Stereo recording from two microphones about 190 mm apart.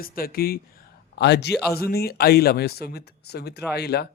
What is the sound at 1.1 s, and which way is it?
Speech, 65° left (ahead or behind).